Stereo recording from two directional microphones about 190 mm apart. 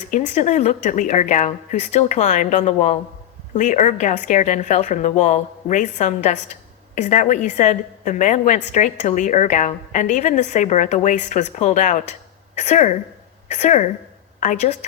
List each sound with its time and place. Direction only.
0.1 s a woman's voice: 40° left (ahead or behind)